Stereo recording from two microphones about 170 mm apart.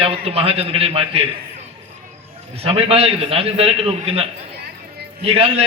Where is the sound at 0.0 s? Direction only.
35° right (ahead or behind).